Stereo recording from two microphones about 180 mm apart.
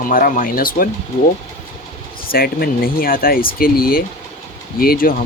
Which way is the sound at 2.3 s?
55° left (ahead or behind).